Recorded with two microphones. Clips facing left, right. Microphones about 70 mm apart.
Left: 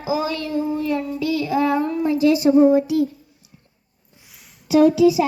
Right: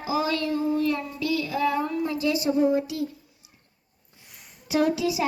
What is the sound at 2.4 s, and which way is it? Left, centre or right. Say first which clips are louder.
Speech: left 8 dB; left.